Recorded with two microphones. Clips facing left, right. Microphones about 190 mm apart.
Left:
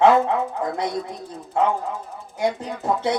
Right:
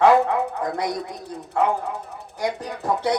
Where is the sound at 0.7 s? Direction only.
25° left (ahead or behind).